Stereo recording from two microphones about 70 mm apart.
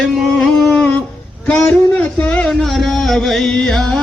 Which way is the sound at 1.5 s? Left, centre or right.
Left.